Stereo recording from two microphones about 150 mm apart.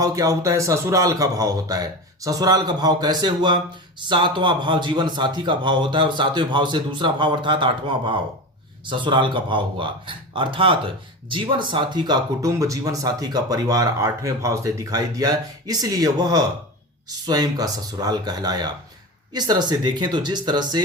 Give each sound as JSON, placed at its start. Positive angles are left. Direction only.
{"t": 0.0, "sound": "a man's voice", "side_deg": -20}